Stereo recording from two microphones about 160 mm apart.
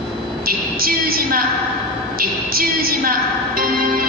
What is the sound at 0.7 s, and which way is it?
Speech, 65° right (ahead or behind).